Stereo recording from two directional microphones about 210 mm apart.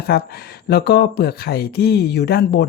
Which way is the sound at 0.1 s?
45° left (ahead or behind).